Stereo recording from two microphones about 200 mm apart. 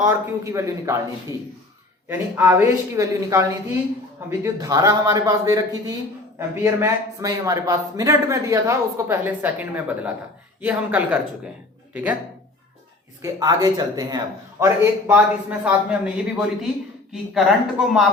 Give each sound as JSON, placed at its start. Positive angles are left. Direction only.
{"t": 0.0, "sound": "a man's voice", "side_deg": -15}
{"t": 13.2, "sound": "a man's voice", "side_deg": -15}